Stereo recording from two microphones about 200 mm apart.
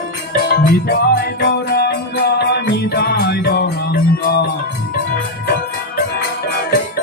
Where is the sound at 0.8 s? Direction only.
50° left (ahead or behind).